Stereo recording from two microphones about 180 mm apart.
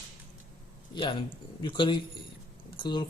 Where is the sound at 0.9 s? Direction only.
25° left (ahead or behind).